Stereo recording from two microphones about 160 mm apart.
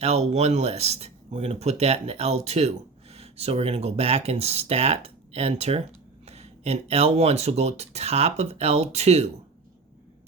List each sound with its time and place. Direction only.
0.0 s speech: 40° right (ahead or behind)